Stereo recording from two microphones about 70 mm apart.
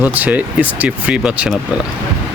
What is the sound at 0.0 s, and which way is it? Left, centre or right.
Speech, right.